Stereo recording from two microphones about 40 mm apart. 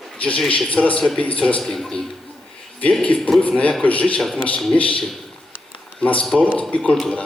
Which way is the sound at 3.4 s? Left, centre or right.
Left.